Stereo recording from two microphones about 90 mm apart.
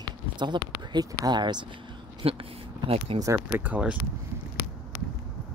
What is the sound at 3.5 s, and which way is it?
Speech, 20° right (ahead or behind).